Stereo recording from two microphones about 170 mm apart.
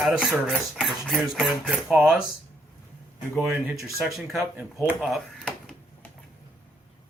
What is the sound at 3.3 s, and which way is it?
Speech, 5° right (ahead or behind).